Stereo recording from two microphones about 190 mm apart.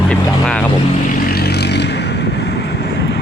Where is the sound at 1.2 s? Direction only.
55° left (ahead or behind).